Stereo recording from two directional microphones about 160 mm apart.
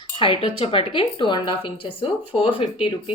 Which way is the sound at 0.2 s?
35° left (ahead or behind).